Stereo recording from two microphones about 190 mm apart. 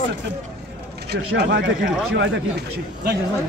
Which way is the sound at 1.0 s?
65° right (ahead or behind).